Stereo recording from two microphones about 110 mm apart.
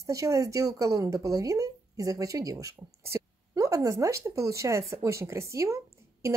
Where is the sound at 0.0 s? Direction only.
30° right (ahead or behind).